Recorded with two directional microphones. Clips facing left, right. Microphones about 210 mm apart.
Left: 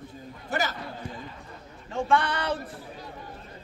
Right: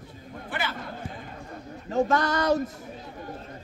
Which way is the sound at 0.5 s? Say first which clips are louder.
Left 4 dB; 45° left (ahead or behind).